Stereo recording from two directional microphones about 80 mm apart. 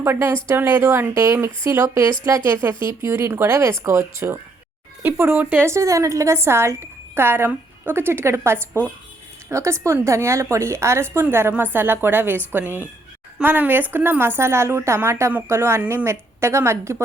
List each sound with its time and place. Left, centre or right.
0.0 s a woman's voice: right
5.7 s a woman's voice: right